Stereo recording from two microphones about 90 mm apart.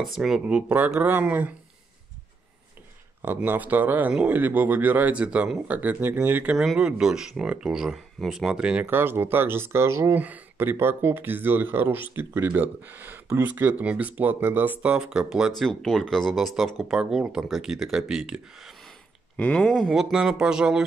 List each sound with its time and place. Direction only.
0.0 s speech: 5° right (ahead or behind)
3.4 s speech: 20° right (ahead or behind)
6.5 s speech: 5° right (ahead or behind)
8.9 s speech: 25° right (ahead or behind)
10.1 s speech: 20° right (ahead or behind)
15.0 s speech: 5° right (ahead or behind)
19.3 s speech: 15° left (ahead or behind)
19.9 s speech: 5° right (ahead or behind)